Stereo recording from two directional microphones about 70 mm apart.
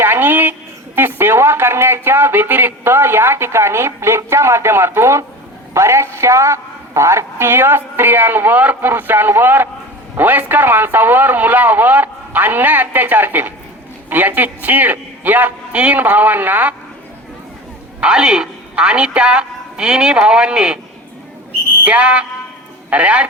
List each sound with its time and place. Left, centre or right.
0.0 s a sound: right
0.9 s speech: right
18.0 s a man's voice: centre
21.8 s speech: centre